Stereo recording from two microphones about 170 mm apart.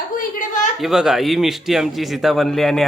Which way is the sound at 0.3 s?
50° left (ahead or behind).